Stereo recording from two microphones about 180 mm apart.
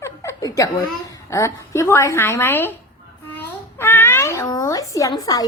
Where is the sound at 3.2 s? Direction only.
10° left (ahead or behind).